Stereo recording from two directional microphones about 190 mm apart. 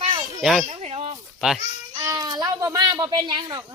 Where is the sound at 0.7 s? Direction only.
30° right (ahead or behind).